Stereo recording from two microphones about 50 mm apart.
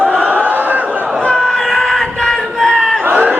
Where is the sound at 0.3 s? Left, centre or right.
Right.